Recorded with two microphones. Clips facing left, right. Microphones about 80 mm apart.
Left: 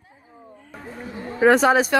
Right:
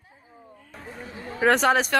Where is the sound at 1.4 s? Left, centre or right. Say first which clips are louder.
Left 4 dB; centre.